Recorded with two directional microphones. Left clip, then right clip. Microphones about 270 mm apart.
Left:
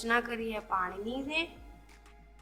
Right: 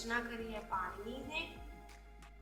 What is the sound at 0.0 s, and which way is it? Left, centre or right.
Speech, left.